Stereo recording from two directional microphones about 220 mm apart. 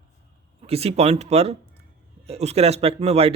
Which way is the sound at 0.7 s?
25° right (ahead or behind).